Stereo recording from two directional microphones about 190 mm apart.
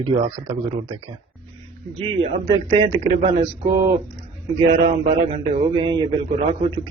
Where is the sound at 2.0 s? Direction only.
30° right (ahead or behind).